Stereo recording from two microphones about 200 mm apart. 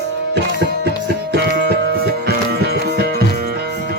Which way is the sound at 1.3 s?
55° right (ahead or behind).